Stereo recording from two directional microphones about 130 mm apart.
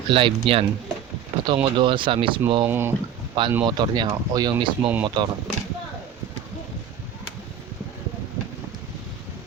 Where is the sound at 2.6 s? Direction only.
15° right (ahead or behind).